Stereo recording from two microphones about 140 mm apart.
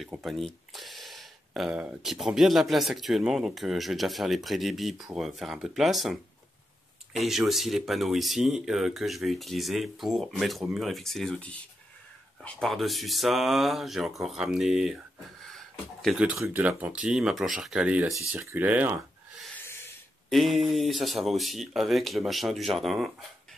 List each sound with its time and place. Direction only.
0.2 s speech: centre (ahead or behind)
7.2 s speech: centre (ahead or behind)
12.6 s speech: centre (ahead or behind)
15.4 s a sound: 5° left (ahead or behind)
16.2 s speech: 10° right (ahead or behind)
19.5 s snort: 15° left (ahead or behind)
20.2 s speech: centre (ahead or behind)